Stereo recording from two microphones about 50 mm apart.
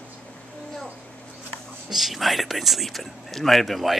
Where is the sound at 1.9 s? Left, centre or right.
Centre.